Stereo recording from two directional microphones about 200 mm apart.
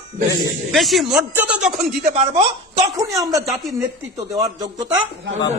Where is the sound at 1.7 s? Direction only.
35° right (ahead or behind).